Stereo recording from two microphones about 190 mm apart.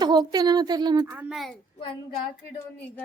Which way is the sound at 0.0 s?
20° right (ahead or behind).